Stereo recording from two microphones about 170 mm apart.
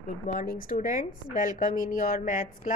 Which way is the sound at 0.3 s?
55° left (ahead or behind).